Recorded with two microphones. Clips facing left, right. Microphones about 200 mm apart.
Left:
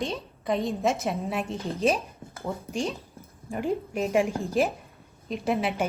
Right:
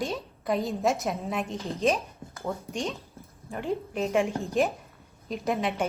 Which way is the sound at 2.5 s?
10° left (ahead or behind).